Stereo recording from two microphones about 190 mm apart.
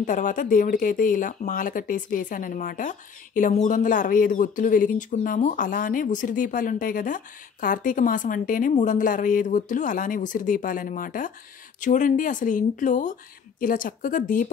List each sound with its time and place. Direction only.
0.0 s speech: 45° left (ahead or behind)